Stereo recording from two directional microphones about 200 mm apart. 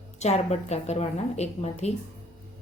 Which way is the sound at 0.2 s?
35° left (ahead or behind).